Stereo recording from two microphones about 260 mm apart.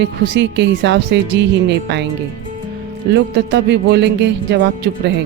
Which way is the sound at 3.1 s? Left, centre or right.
Right.